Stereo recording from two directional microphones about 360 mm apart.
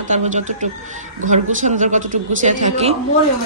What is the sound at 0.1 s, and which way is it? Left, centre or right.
Speech, centre.